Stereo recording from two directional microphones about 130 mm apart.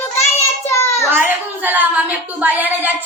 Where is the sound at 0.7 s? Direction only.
25° left (ahead or behind).